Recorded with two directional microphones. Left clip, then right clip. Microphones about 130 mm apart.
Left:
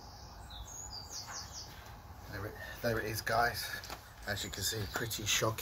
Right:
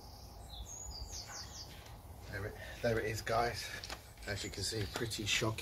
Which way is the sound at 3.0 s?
5° right (ahead or behind).